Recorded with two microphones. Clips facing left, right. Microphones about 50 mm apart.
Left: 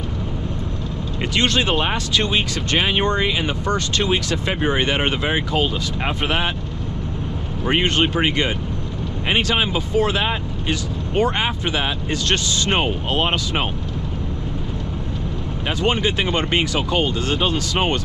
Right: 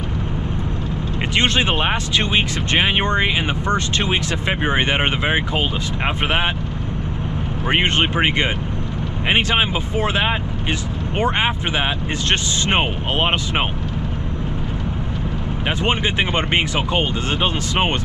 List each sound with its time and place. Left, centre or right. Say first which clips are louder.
1.3 s speech: right 1 dB; right
7.6 s speech: even; right
15.8 s speech: left 1 dB; right